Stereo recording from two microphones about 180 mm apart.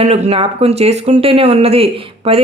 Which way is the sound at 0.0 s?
35° right (ahead or behind).